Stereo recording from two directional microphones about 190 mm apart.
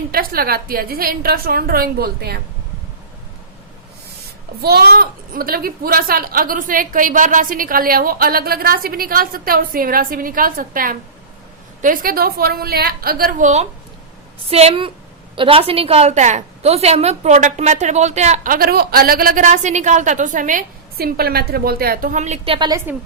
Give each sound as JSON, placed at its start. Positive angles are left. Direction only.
{"t": 0.1, "sound": "a woman's voice", "side_deg": -50}
{"t": 4.6, "sound": "a woman's voice", "side_deg": -55}
{"t": 22.5, "sound": "a woman's voice", "side_deg": -25}